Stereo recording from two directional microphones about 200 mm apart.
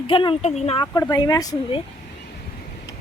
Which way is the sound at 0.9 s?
20° left (ahead or behind).